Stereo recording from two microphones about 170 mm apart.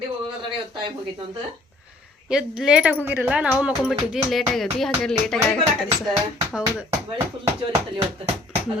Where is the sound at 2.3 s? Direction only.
5° right (ahead or behind).